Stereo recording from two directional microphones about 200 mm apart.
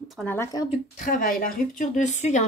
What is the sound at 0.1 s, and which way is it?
Speech, 10° left (ahead or behind).